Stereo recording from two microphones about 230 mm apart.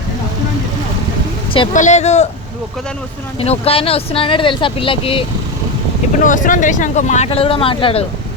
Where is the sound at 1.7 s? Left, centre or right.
Left.